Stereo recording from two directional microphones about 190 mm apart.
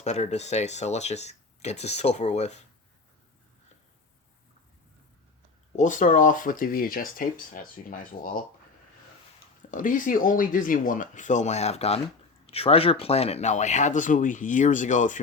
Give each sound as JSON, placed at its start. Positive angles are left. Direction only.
{"t": 0.0, "sound": "speech", "side_deg": 35}
{"t": 5.7, "sound": "speech", "side_deg": 40}
{"t": 9.7, "sound": "speech", "side_deg": 45}